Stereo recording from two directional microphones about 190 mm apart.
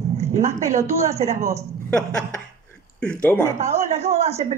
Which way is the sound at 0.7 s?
15° right (ahead or behind).